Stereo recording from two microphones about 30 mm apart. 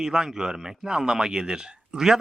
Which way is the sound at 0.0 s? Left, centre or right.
Right.